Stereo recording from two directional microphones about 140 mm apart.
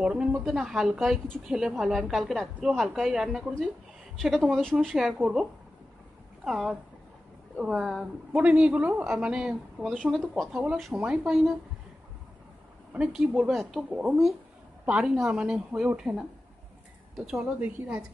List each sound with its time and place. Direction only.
0.0 s a woman's voice: 5° right (ahead or behind)
12.9 s a woman's voice: 5° right (ahead or behind)